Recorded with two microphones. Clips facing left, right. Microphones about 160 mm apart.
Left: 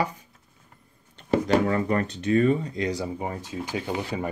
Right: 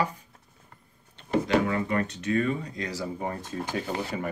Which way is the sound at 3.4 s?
50° right (ahead or behind).